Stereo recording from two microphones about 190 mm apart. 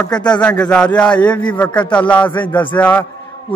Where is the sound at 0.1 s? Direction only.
5° left (ahead or behind).